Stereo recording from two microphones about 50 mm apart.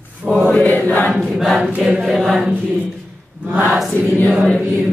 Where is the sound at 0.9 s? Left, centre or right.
Left.